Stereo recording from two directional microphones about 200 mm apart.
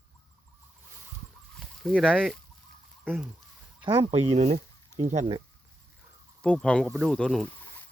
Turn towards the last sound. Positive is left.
turn(degrees=0)  # may be behind; listen again after turning